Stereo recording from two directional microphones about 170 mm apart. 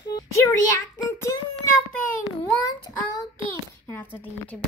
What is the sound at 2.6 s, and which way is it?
Speech, 20° left (ahead or behind).